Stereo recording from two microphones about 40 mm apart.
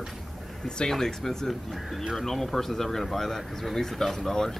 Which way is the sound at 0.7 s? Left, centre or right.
Centre.